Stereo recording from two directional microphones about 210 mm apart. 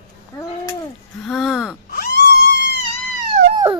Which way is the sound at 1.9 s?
45° left (ahead or behind).